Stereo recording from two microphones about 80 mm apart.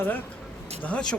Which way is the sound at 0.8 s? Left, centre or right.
Centre.